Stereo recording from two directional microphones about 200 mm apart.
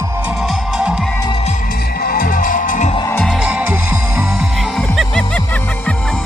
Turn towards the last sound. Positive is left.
turn(degrees=0)  # may be behind; listen again after turning